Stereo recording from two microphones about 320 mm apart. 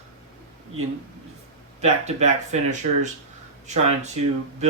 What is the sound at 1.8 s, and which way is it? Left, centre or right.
Speech, centre.